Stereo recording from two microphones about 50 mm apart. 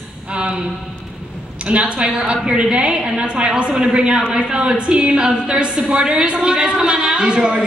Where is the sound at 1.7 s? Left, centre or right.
Right.